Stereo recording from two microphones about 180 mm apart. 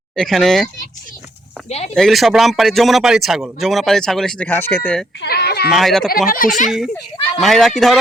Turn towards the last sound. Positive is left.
turn(degrees=0)  # may be behind; listen again after turning